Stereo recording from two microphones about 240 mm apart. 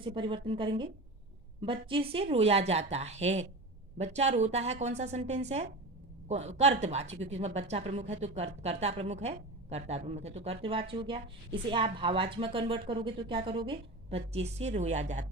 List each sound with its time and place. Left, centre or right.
0.0 s a woman's voice: right